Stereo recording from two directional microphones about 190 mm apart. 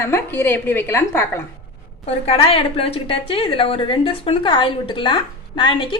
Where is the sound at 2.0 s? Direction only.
30° left (ahead or behind).